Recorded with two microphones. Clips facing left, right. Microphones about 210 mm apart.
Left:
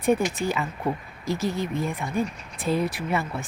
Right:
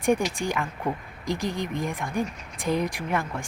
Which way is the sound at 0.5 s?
5° left (ahead or behind).